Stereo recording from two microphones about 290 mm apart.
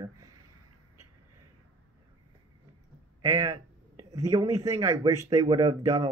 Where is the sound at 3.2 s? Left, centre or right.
Centre.